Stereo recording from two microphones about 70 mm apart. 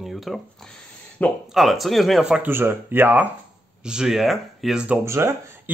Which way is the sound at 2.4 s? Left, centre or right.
Right.